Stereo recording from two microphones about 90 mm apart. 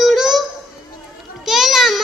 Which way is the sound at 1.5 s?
Centre (ahead or behind).